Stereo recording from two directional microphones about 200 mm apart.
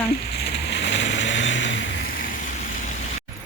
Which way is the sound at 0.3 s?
55° left (ahead or behind).